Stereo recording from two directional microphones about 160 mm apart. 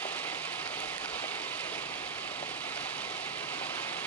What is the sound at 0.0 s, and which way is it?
Rain, 10° left (ahead or behind).